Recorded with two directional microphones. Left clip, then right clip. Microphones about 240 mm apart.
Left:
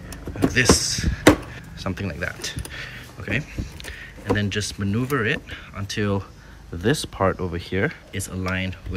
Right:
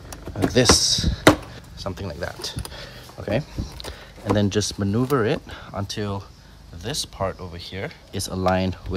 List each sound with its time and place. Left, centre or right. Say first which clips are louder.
0.5 s speech: right 2 dB; centre
8.1 s speech: right 6 dB; centre